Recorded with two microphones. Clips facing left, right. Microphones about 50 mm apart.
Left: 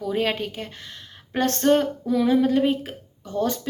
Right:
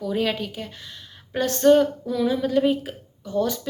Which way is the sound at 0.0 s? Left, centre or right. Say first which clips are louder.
Even; left.